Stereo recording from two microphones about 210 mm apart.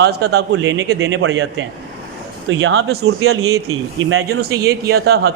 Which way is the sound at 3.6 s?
75° right (ahead or behind).